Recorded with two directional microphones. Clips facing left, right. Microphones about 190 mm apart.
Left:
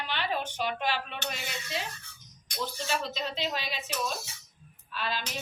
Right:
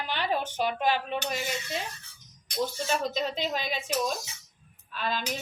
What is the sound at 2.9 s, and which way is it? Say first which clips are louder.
Speech: right 4 dB; 45° right (ahead or behind).